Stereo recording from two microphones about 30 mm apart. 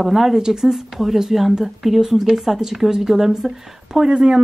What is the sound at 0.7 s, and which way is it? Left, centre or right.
Speech, centre.